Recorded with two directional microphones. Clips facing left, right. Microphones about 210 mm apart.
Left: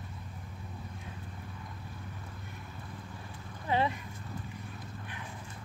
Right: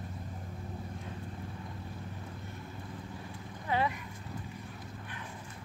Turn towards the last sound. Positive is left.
turn(degrees=25)  # may be behind; listen again after turning